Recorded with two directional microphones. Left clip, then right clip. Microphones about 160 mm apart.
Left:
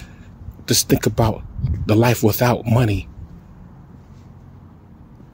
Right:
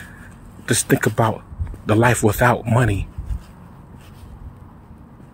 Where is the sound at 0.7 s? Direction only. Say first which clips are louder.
Left 1 dB; 30° left (ahead or behind).